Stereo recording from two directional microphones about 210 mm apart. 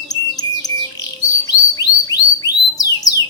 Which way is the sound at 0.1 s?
15° left (ahead or behind).